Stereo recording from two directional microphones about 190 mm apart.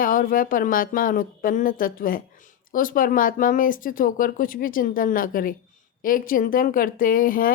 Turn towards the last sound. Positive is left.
turn(degrees=45)  # may be behind; listen again after turning